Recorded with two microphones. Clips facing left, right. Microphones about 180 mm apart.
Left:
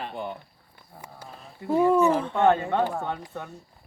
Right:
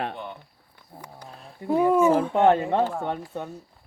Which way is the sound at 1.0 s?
5° left (ahead or behind).